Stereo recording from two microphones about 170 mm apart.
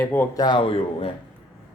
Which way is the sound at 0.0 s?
10° left (ahead or behind).